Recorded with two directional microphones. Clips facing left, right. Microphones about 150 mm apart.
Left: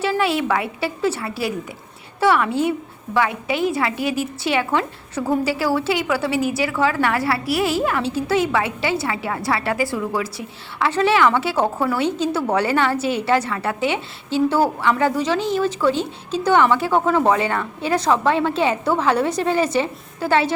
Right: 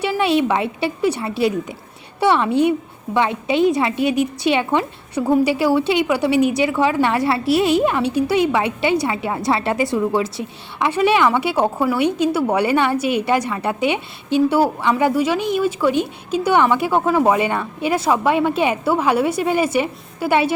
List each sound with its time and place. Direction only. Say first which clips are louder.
0.0 s a woman's voice: right 3 dB; 20° right (ahead or behind)